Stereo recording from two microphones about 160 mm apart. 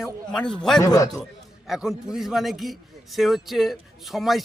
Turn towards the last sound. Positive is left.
turn(degrees=0)  # may be behind; listen again after turning